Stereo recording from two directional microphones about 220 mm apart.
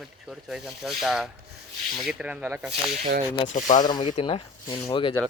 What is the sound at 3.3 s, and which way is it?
Speech, 35° left (ahead or behind).